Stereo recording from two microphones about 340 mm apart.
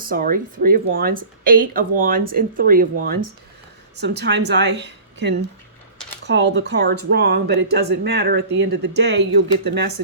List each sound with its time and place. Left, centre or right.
0.0 s a woman's voice: right